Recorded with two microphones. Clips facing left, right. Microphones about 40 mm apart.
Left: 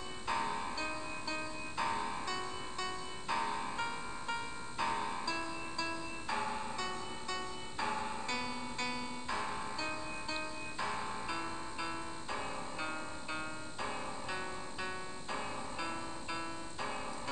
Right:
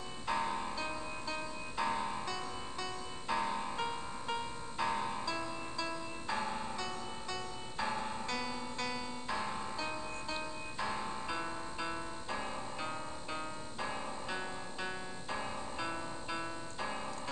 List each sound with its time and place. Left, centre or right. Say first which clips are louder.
0.3 s music: right 1 dB; centre
3.8 s music: right 1 dB; centre
4.8 s music: right 1 dB; centre
6.8 s music: left 1 dB; centre
7.8 s music: even; centre
8.3 s music: even; centre
9.3 s music: right 1 dB; centre
15.8 s music: right 1 dB; centre